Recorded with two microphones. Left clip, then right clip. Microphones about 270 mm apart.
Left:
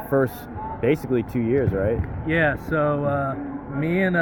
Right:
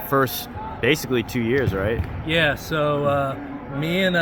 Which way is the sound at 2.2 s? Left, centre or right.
Right.